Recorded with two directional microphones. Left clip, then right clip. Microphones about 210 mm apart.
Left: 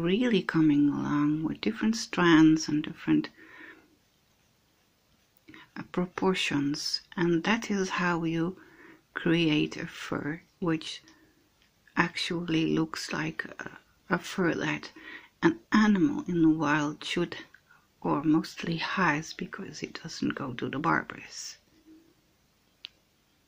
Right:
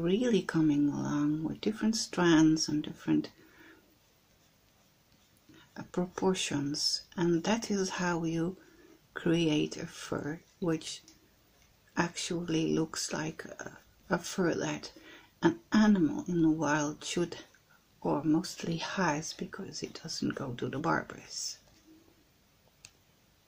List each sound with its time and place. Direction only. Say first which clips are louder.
0.0 s speech: left 2 dB; 10° left (ahead or behind)
5.8 s speech: left 3 dB; 10° left (ahead or behind)